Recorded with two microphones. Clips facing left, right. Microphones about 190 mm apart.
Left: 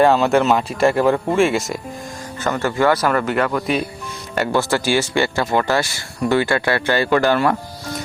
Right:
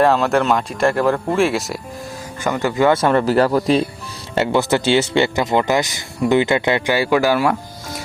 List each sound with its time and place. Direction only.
0.0 s speech: centre (ahead or behind)
2.4 s speech: 15° right (ahead or behind); by 3.8 s 30° right (ahead or behind)
4.4 s speech: 20° right (ahead or behind)